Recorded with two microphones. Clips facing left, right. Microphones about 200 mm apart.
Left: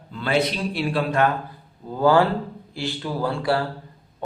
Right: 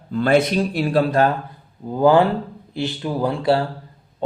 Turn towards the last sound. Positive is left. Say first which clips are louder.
# right 4 dB
turn(degrees=-25)  # may be behind; listen again after turning